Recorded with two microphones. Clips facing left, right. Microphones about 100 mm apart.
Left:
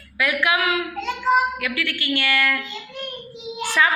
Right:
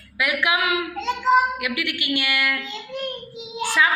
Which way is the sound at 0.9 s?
30° right (ahead or behind).